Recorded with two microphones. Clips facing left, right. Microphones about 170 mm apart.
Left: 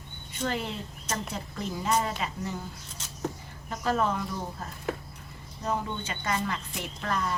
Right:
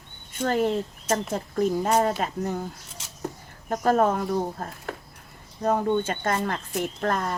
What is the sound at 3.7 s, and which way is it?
Speech, 45° right (ahead or behind).